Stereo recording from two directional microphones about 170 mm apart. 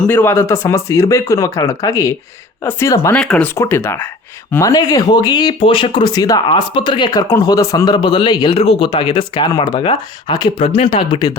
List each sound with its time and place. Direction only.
0.0 s speech: 10° left (ahead or behind)
3.2 s speech: 5° left (ahead or behind); by 11.3 s 25° left (ahead or behind)